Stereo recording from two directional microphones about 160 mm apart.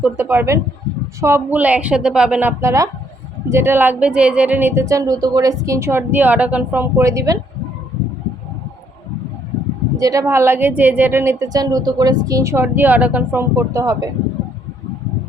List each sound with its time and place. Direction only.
0.0 s a woman's voice: 10° right (ahead or behind)
10.0 s a woman's voice: 20° right (ahead or behind)